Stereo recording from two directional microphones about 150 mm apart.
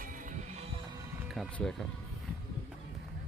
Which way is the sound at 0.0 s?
60° right (ahead or behind).